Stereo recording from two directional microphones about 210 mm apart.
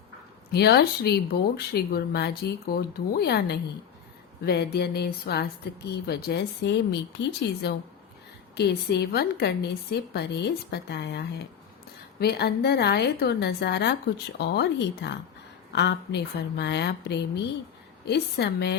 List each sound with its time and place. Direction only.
0.5 s speech: 50° left (ahead or behind)